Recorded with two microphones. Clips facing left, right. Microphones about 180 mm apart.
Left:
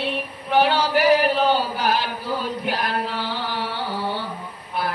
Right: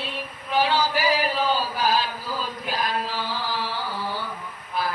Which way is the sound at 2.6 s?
65° left (ahead or behind).